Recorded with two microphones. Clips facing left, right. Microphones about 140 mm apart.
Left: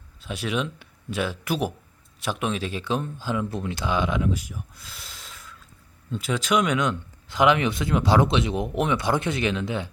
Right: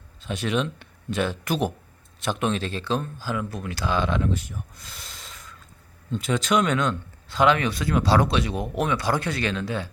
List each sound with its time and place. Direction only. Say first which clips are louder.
0.2 s speech: right 2 dB; 5° left (ahead or behind)